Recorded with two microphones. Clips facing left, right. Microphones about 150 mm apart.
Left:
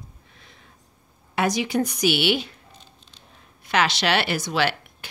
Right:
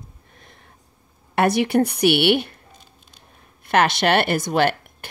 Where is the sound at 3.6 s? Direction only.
55° right (ahead or behind).